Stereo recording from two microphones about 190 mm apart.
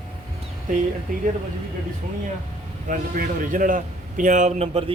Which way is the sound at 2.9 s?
45° right (ahead or behind).